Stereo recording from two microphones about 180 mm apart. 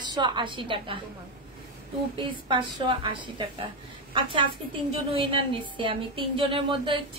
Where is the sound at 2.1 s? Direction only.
25° right (ahead or behind).